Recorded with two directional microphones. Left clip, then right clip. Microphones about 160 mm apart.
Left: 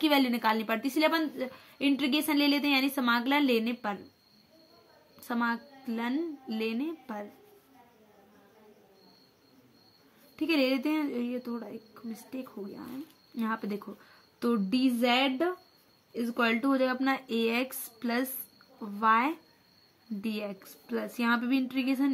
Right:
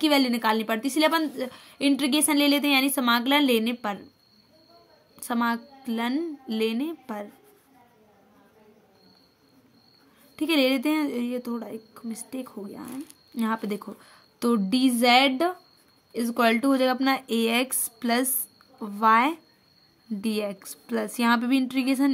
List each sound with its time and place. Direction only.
0.0 s a woman's voice: 25° right (ahead or behind)
5.2 s a woman's voice: 30° right (ahead or behind)
10.3 s a woman's voice: 35° right (ahead or behind)